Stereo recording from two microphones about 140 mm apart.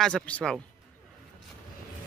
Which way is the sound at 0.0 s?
5° left (ahead or behind).